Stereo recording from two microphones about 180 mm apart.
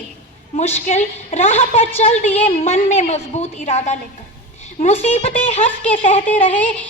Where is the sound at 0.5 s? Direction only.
35° left (ahead or behind).